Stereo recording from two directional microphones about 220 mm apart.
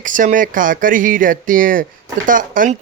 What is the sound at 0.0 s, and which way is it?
A man's voice, 35° right (ahead or behind).